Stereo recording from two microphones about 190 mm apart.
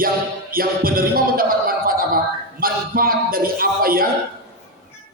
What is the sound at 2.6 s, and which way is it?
Speech, 50° right (ahead or behind).